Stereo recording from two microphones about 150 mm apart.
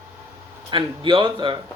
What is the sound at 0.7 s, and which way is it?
Speech, 35° right (ahead or behind).